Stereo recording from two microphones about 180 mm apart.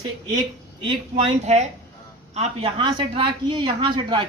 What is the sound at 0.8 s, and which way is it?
A man's voice, 30° right (ahead or behind).